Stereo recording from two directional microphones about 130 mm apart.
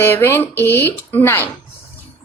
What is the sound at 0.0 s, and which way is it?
A woman's voice, 20° left (ahead or behind).